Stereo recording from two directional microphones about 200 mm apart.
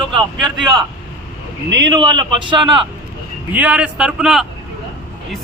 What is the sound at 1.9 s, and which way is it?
Speech, 25° right (ahead or behind).